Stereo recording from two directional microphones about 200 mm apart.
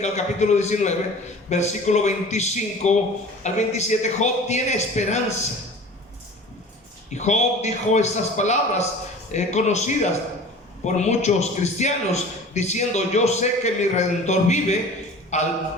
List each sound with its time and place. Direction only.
0.0 s a man's voice: 35° left (ahead or behind)
7.1 s a man's voice: 35° left (ahead or behind)